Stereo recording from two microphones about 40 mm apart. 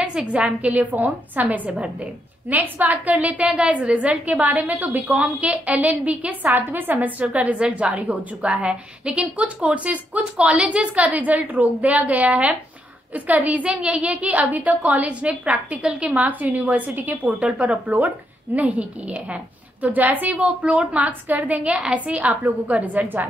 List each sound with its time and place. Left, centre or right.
0.0 s a woman's voice: right
0.7 s a woman's voice: right
1.7 s a woman's voice: right
2.5 s a woman's voice: right
4.3 s a woman's voice: right
6.5 s a woman's voice: right
14.1 s a woman's voice: right
17.4 s a woman's voice: right